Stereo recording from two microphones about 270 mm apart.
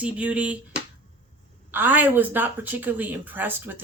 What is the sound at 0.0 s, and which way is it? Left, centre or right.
Speech, centre.